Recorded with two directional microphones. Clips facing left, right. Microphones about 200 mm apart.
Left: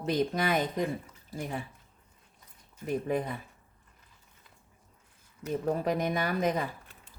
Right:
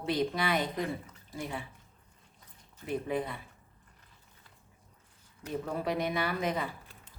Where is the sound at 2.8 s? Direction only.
45° left (ahead or behind).